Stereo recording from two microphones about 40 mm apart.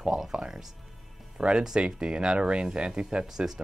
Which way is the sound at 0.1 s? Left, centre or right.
Centre.